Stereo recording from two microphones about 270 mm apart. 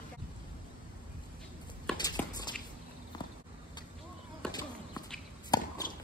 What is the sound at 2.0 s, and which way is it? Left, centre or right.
Walk, centre.